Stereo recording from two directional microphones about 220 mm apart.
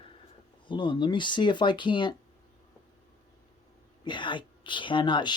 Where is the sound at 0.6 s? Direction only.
20° left (ahead or behind).